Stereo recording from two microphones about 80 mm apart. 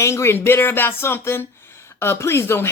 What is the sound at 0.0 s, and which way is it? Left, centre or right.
Speech, left.